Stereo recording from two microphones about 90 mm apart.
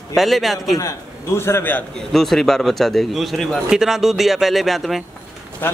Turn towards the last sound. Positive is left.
turn(degrees=0)  # may be behind; listen again after turning